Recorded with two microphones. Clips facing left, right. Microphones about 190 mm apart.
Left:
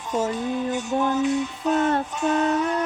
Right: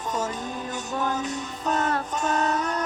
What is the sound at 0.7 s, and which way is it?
Music, 40° right (ahead or behind).